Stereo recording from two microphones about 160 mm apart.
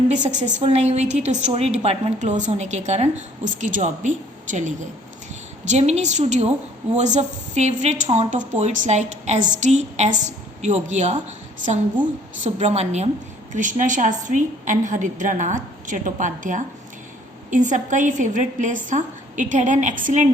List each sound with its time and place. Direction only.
0.1 s a woman's voice: 50° right (ahead or behind)
12.4 s a woman's voice: 45° right (ahead or behind)
13.5 s a woman's voice: 55° right (ahead or behind)